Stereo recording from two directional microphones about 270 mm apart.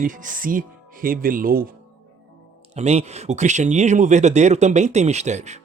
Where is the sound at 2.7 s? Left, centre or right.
Right.